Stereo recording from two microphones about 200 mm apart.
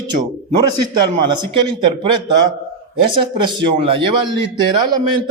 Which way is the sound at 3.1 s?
25° right (ahead or behind).